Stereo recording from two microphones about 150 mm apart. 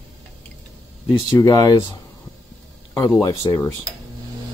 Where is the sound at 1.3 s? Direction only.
20° left (ahead or behind).